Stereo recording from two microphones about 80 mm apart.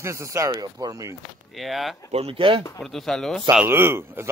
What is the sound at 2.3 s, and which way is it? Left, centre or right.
Speech, right.